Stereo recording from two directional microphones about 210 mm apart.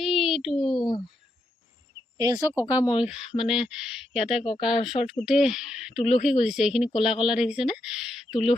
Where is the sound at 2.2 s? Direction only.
15° right (ahead or behind).